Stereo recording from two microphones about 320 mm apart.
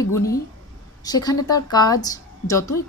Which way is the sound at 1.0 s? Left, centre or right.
Centre.